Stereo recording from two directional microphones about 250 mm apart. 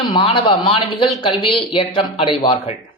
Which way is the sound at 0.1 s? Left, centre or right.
Centre.